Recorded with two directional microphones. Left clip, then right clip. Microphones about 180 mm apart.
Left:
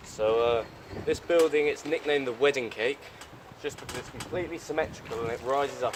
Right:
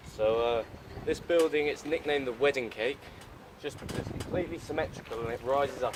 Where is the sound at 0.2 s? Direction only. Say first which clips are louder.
Left 3 dB; 15° left (ahead or behind).